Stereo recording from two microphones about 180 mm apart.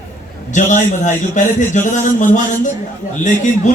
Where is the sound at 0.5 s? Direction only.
45° left (ahead or behind).